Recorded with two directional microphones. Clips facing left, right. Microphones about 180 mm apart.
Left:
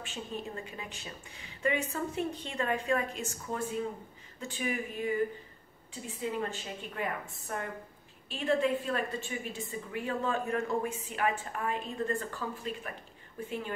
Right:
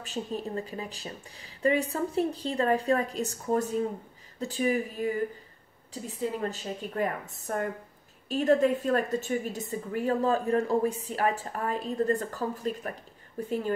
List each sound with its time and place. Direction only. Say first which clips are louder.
0.0 s a woman's voice: right 6 dB; 35° right (ahead or behind)